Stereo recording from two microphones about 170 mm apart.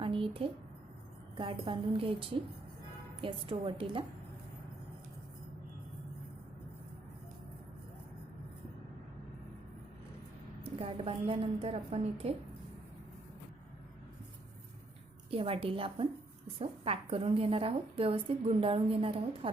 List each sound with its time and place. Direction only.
0.0 s a sound: 30° right (ahead or behind)
1.4 s a woman's voice: 30° right (ahead or behind)
10.6 s a woman's voice: 35° right (ahead or behind)
15.3 s a woman's voice: 35° right (ahead or behind)